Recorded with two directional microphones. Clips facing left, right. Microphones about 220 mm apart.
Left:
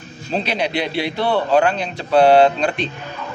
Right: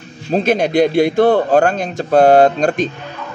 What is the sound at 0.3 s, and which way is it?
A man's voice, 45° right (ahead or behind).